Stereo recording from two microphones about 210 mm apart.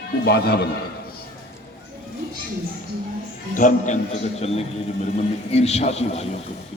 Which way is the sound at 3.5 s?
35° left (ahead or behind).